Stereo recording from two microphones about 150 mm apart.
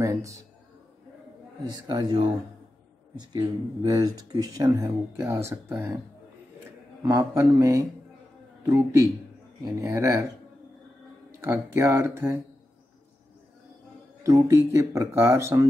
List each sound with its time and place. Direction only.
0.0 s a man's voice: 20° right (ahead or behind)
1.7 s speech: 30° right (ahead or behind)
7.1 s speech: 20° right (ahead or behind)
11.4 s speech: 15° right (ahead or behind)
14.2 s speech: 20° right (ahead or behind)